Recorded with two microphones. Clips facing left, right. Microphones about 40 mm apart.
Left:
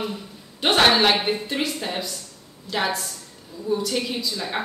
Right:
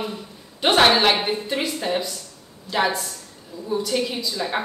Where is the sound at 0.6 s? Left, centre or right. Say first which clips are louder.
Right 1 dB; centre.